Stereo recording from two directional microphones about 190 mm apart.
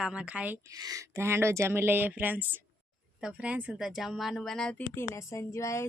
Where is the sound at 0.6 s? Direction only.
20° right (ahead or behind).